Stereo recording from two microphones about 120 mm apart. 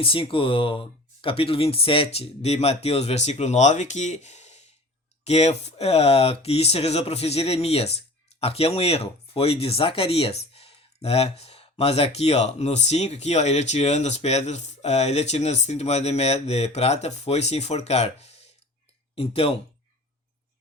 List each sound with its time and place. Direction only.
0.0 s speech: 50° left (ahead or behind)